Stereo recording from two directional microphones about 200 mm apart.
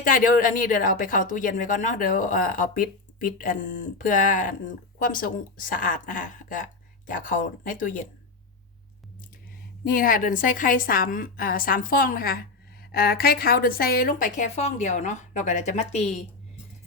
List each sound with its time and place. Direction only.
0.0 s a woman's voice: 45° left (ahead or behind)
9.8 s a woman's voice: 45° left (ahead or behind)